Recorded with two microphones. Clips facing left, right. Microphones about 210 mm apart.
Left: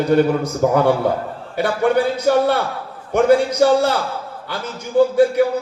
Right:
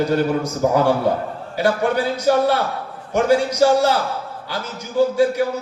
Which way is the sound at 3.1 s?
55° left (ahead or behind).